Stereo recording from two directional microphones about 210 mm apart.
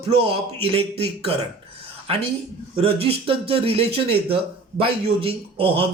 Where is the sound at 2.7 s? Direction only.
25° right (ahead or behind).